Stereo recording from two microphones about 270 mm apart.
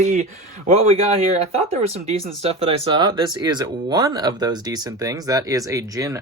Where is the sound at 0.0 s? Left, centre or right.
Right.